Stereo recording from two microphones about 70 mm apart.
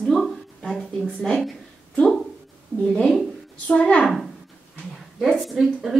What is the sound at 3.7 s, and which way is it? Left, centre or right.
Speech, centre.